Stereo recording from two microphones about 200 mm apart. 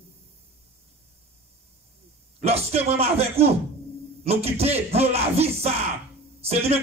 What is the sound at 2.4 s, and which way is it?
A man's voice, 30° right (ahead or behind).